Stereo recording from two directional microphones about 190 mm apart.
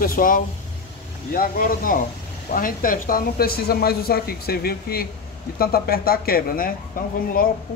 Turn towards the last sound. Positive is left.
turn(degrees=50)  # may be behind; listen again after turning